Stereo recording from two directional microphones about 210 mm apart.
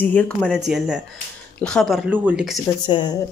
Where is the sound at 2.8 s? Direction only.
20° left (ahead or behind).